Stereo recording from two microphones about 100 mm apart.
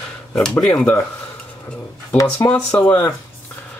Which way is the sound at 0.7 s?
15° left (ahead or behind).